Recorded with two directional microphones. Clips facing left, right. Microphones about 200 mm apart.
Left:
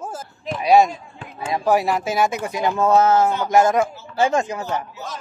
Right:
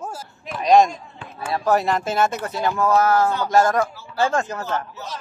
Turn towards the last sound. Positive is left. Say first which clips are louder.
# left 2 dB
turn(degrees=15)  # may be behind; listen again after turning